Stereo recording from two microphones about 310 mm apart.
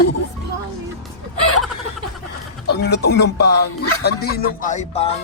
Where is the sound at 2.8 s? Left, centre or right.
Left.